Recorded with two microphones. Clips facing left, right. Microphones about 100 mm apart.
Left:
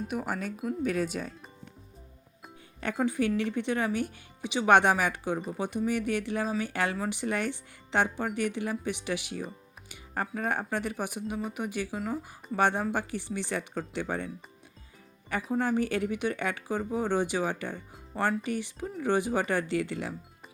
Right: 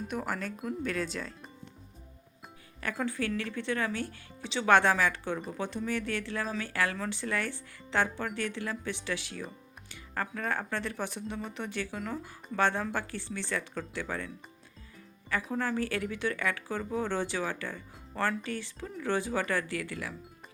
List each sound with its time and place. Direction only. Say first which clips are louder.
0.1 s speech: left 2 dB; 10° left (ahead or behind)
2.8 s speech: left 5 dB; 15° left (ahead or behind)
15.5 s speech: left 5 dB; 20° left (ahead or behind)